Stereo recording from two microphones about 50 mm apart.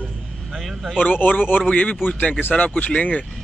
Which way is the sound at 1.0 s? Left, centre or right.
Left.